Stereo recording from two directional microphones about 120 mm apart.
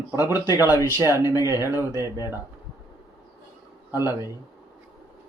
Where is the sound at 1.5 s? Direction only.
20° right (ahead or behind).